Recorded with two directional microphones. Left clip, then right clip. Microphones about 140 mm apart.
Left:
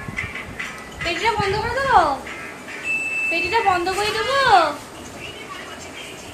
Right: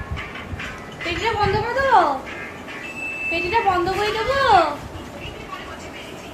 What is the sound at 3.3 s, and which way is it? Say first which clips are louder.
Speech: even; 30° left (ahead or behind).